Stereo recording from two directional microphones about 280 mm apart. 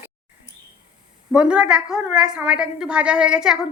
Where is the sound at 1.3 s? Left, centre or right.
Centre.